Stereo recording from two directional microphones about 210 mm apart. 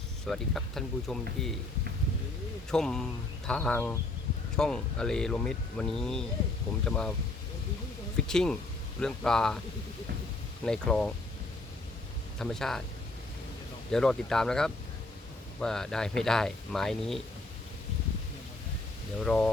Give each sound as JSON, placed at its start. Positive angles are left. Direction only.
{"t": 0.3, "sound": "speech", "side_deg": 0}
{"t": 2.6, "sound": "speech", "side_deg": 5}
{"t": 8.3, "sound": "speech", "side_deg": 5}
{"t": 10.7, "sound": "speech", "side_deg": 5}
{"t": 12.4, "sound": "speech", "side_deg": 0}
{"t": 13.9, "sound": "speech", "side_deg": 5}
{"t": 19.2, "sound": "speech", "side_deg": 5}